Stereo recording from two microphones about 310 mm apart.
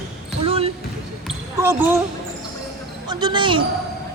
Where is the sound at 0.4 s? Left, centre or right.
Centre.